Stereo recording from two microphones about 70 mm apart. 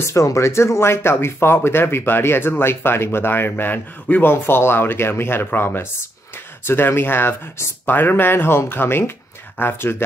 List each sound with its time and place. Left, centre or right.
0.0 s speech: left